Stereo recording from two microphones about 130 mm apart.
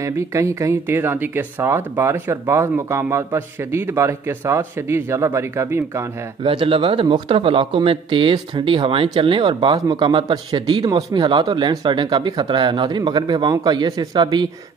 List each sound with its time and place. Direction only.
0.0 s speech: 25° right (ahead or behind)
6.4 s a man's voice: 40° right (ahead or behind)